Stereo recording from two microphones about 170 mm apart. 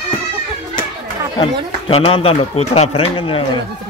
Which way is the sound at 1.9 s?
35° left (ahead or behind).